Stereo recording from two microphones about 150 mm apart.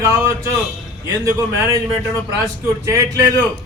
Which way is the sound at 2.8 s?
20° right (ahead or behind).